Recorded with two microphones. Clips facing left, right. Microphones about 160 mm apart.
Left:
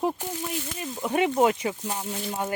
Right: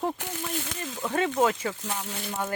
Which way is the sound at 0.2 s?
75° right (ahead or behind).